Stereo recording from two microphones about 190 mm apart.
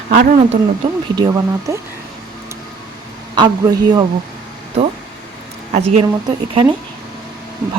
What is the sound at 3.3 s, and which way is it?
Speech, 20° right (ahead or behind).